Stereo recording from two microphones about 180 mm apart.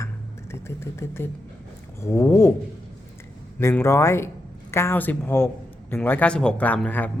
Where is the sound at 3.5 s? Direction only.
15° left (ahead or behind).